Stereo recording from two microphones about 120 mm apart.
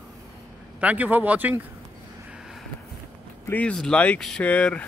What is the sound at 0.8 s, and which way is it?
Speech, 10° right (ahead or behind).